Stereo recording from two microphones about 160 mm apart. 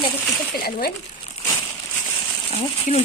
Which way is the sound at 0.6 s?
75° left (ahead or behind).